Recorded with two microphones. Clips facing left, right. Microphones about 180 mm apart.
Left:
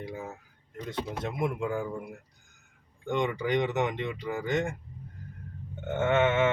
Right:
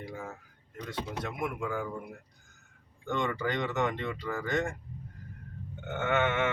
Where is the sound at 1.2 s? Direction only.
25° left (ahead or behind).